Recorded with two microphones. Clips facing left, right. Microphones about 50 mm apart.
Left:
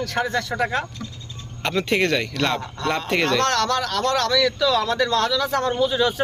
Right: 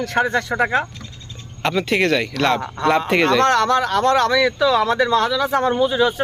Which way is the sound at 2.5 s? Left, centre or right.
Centre.